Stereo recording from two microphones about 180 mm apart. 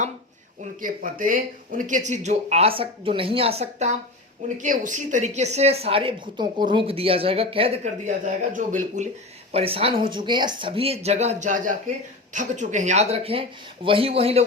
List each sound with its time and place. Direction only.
0.8 s speech: 50° right (ahead or behind)
9.5 s speech: 30° right (ahead or behind)